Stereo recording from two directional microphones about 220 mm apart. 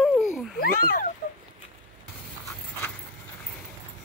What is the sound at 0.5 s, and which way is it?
Cat, 40° left (ahead or behind).